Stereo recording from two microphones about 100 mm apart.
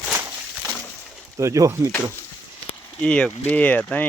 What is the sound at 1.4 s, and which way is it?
Speech, 30° right (ahead or behind).